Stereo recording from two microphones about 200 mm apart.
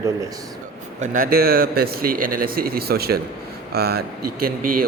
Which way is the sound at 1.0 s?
40° right (ahead or behind).